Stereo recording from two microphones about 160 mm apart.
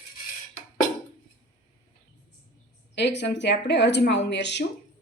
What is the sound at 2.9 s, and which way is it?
A woman's voice, 90° left.